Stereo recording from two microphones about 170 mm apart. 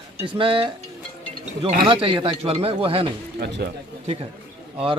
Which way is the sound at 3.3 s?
75° right (ahead or behind).